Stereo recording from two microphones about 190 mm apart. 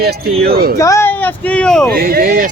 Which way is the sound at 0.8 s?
15° left (ahead or behind).